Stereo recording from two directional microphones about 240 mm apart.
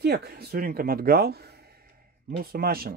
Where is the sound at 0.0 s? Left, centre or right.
Right.